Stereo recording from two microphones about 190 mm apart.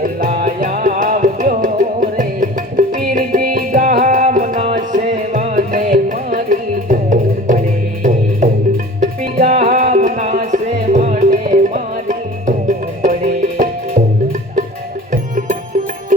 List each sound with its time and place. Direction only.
0.0 s music: 40° right (ahead or behind)
9.0 s music: 40° right (ahead or behind)
15.1 s music: 45° right (ahead or behind)